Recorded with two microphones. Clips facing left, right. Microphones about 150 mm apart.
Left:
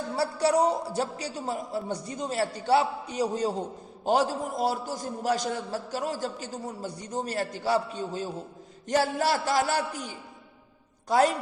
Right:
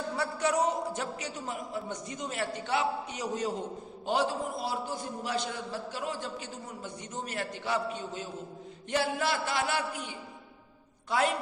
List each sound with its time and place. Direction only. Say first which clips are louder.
0.1 s a man's voice: left 6 dB; 35° left (ahead or behind)